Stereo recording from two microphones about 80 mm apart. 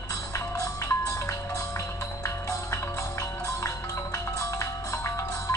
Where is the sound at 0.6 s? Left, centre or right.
Left.